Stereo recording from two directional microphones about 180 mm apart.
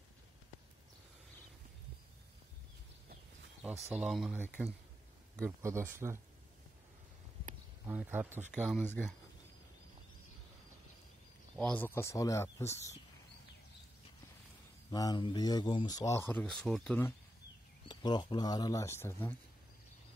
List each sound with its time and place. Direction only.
3.9 s speech: 5° right (ahead or behind)
7.8 s speech: 10° right (ahead or behind)
8.8 s speech: 10° left (ahead or behind)
11.5 s speech: 5° left (ahead or behind)
14.9 s speech: 20° left (ahead or behind); by 17.0 s 5° left (ahead or behind)
17.8 s speech: 25° left (ahead or behind)